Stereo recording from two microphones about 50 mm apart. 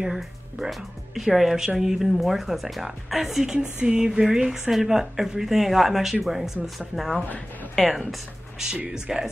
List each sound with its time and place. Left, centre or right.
0.0 s a woman's voice: centre
3.8 s a woman's voice: centre
8.8 s speech: right